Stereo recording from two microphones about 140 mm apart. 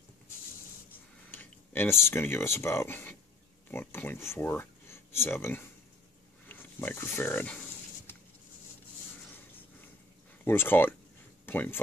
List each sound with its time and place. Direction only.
1.3 s speech: 15° left (ahead or behind)
10.4 s speech: 15° left (ahead or behind)